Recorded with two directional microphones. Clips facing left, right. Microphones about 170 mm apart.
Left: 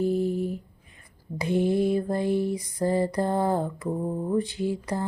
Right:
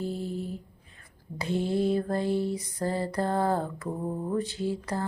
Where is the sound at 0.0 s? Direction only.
15° left (ahead or behind).